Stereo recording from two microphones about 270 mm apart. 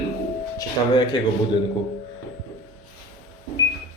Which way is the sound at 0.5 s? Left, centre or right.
Centre.